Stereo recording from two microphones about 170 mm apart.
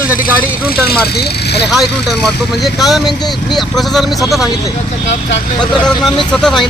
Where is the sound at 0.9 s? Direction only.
70° left (ahead or behind).